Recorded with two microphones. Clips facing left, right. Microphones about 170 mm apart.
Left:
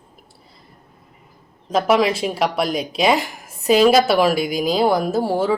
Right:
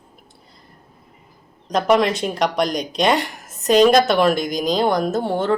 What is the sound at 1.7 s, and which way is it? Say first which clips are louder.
A woman's voice: even; 5° left (ahead or behind).